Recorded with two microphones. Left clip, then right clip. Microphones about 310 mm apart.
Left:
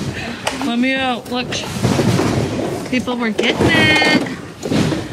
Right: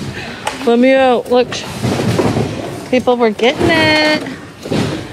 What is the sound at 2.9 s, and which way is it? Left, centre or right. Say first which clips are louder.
Speech: right 13 dB; centre.